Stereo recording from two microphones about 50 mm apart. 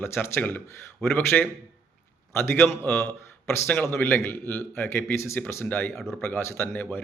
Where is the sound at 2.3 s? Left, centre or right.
Left.